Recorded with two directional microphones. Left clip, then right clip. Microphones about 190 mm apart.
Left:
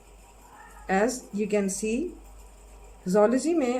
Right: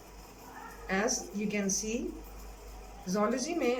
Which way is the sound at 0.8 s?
40° left (ahead or behind).